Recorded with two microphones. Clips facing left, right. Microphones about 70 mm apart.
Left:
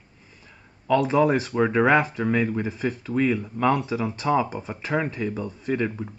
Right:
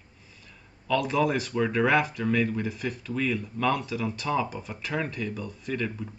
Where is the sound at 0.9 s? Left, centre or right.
Left.